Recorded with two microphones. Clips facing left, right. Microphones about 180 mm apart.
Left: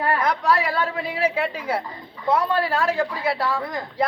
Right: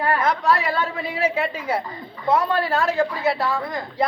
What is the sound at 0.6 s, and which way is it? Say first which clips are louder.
A woman's voice: even; 10° left (ahead or behind).